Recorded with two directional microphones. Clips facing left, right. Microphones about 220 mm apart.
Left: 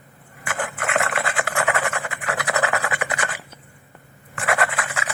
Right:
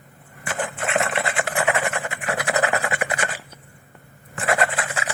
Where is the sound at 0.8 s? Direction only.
25° right (ahead or behind).